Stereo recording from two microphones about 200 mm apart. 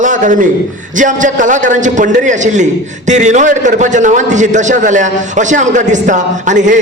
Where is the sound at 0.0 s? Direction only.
40° right (ahead or behind).